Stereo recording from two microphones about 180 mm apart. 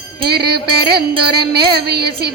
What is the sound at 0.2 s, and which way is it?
Music, 60° right (ahead or behind).